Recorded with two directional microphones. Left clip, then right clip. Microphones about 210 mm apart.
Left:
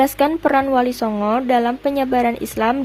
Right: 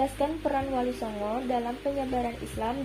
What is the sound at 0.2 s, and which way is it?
A woman's voice, 50° left (ahead or behind).